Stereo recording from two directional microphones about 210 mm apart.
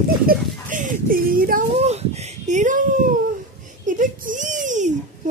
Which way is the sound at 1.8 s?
30° right (ahead or behind).